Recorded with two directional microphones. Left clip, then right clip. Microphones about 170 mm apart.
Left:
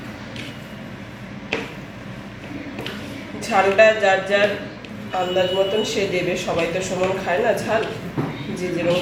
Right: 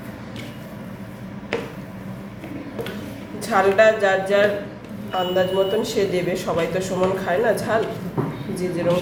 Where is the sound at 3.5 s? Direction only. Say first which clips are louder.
Left 1 dB; centre (ahead or behind).